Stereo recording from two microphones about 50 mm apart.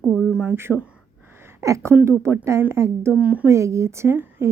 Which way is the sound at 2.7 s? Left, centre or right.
Right.